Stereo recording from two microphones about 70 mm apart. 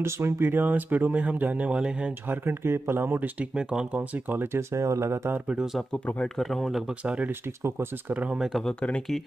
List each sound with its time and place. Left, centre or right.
0.0 s speech: right; by 1.9 s centre
2.2 s speech: right
3.5 s speech: centre
4.3 s speech: right
6.3 s speech: centre
8.1 s speech: right
8.6 s speech: centre